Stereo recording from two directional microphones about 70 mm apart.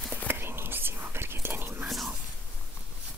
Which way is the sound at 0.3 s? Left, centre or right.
Right.